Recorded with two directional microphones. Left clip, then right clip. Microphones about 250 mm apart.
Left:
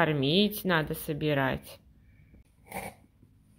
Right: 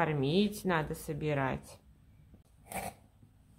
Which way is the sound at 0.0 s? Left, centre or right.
Centre.